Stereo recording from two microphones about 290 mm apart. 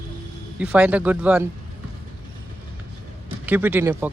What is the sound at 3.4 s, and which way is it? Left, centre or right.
Speech, centre.